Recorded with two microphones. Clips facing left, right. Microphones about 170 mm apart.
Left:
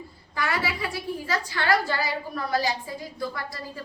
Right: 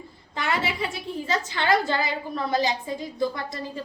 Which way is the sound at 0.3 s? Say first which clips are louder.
Right 1 dB; 25° right (ahead or behind).